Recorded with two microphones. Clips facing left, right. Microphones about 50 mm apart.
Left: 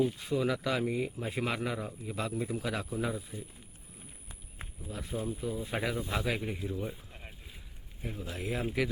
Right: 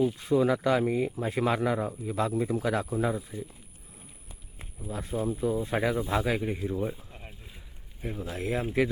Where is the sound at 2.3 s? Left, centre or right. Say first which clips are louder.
Right 7 dB; right.